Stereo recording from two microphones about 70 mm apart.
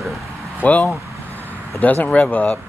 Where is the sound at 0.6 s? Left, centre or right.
Left.